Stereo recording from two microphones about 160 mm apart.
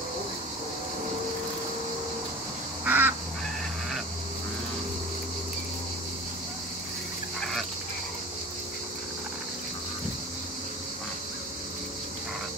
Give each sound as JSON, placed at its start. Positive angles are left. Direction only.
{"t": 2.8, "sound": "duck", "side_deg": -10}
{"t": 7.3, "sound": "fowl", "side_deg": 0}